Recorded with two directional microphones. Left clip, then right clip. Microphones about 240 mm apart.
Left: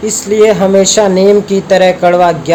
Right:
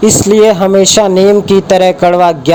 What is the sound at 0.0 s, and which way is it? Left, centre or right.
Speech, right.